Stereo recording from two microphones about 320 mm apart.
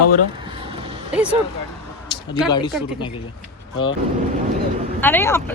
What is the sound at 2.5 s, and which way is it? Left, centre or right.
Speech, centre.